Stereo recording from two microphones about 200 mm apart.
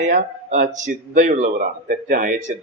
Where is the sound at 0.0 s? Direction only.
40° right (ahead or behind).